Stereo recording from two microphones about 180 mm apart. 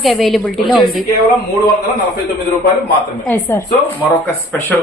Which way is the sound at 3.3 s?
10° left (ahead or behind).